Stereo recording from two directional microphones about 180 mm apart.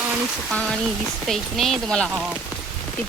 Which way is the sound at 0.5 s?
5° left (ahead or behind).